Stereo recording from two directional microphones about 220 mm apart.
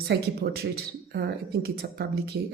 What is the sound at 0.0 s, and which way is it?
Speech, 45° right (ahead or behind).